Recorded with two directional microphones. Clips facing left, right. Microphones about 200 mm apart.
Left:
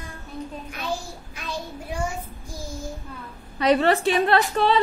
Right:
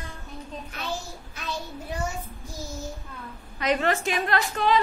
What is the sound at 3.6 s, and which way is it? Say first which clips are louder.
A woman's voice: left 5 dB; 35° left (ahead or behind).